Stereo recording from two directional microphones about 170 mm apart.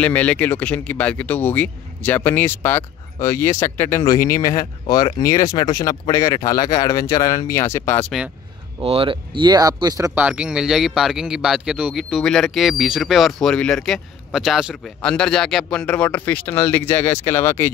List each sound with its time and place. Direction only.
0.0 s speech: 10° left (ahead or behind)
8.8 s speech: 30° right (ahead or behind); by 17.6 s 15° left (ahead or behind)